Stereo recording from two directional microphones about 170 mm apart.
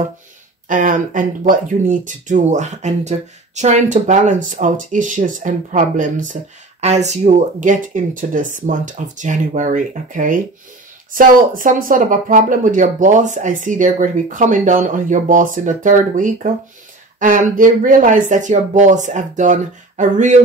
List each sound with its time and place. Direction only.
0.7 s speech: 50° right (ahead or behind)